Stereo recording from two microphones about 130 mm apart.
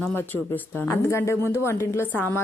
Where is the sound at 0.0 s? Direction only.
15° left (ahead or behind).